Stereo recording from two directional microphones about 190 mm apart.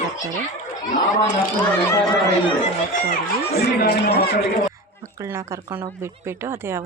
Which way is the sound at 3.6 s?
60° left (ahead or behind).